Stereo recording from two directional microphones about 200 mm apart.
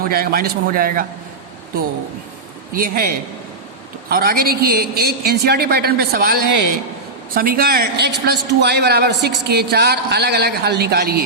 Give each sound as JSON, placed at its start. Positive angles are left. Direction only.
{"t": 0.0, "sound": "a man's voice", "side_deg": -50}
{"t": 2.7, "sound": "a man's voice", "side_deg": -45}
{"t": 4.1, "sound": "a man's voice", "side_deg": -50}